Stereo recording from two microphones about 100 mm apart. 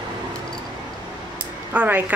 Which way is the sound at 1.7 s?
15° right (ahead or behind).